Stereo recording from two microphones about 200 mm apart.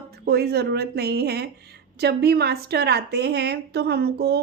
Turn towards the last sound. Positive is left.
turn(degrees=-55)  # may be behind; listen again after turning